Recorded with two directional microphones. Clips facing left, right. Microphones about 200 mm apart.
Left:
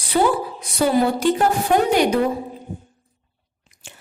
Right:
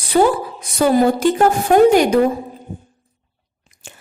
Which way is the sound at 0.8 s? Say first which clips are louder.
Right 4 dB; 45° right (ahead or behind).